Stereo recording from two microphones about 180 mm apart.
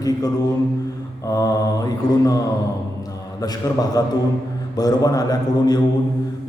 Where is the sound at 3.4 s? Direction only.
20° left (ahead or behind).